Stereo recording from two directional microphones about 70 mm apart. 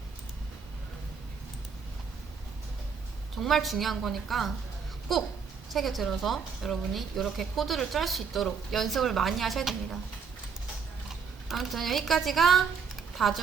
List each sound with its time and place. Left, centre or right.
3.3 s speech: centre
11.4 s speech: centre